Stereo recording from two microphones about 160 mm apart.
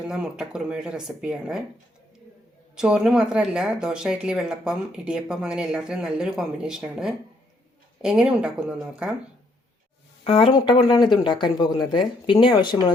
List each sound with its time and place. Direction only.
0.0 s speech: 5° right (ahead or behind)
2.7 s speech: 5° right (ahead or behind)
10.2 s speech: 35° left (ahead or behind)